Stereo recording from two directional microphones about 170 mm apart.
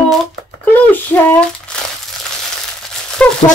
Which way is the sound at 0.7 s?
10° left (ahead or behind).